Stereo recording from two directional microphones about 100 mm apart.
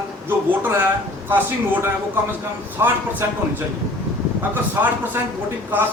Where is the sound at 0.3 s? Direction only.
25° right (ahead or behind).